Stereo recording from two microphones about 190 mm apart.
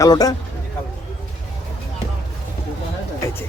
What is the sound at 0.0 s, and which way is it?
Speech, 20° left (ahead or behind).